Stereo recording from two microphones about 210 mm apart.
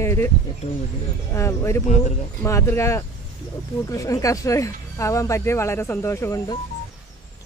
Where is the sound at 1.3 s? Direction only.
15° left (ahead or behind).